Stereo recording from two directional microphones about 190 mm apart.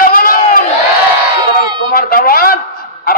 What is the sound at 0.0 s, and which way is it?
Crowd, 50° left (ahead or behind).